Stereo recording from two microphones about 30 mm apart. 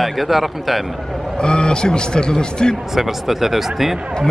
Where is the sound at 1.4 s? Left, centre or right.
Left.